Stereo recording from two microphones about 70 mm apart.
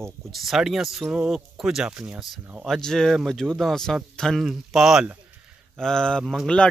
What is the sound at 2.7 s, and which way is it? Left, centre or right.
A man's voice, centre.